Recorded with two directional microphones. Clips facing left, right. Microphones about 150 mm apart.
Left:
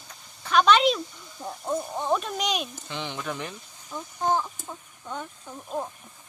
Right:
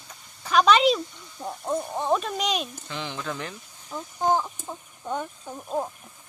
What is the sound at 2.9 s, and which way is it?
Speech, 20° left (ahead or behind).